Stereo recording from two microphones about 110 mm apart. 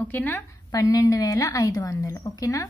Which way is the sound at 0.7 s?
35° left (ahead or behind).